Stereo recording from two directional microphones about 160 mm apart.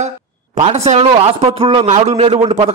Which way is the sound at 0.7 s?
40° right (ahead or behind).